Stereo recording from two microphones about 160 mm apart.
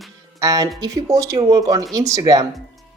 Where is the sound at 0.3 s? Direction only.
20° right (ahead or behind).